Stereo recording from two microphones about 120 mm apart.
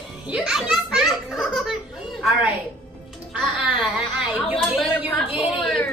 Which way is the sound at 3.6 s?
10° right (ahead or behind).